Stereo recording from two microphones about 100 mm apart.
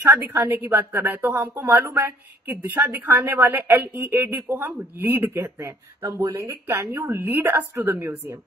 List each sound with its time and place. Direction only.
0.0 s a woman's voice: 20° right (ahead or behind)